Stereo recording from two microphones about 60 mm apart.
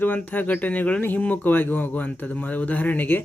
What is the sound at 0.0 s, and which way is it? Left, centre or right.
Speech, left.